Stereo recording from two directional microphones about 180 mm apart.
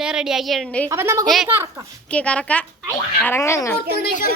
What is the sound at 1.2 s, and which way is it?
Speech, centre (ahead or behind).